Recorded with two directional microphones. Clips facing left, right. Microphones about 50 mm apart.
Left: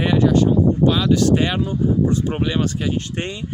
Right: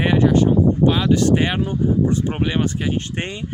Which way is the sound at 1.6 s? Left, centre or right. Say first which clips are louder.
Even; right.